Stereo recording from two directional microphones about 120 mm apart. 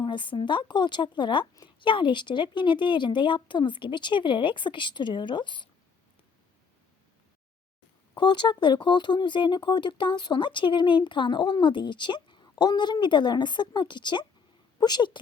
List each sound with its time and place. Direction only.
0.0 s speech: 40° left (ahead or behind)
8.1 s speech: 40° left (ahead or behind)